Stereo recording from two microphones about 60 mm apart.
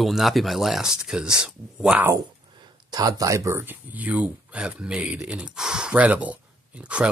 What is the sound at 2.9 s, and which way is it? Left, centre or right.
Speech, right.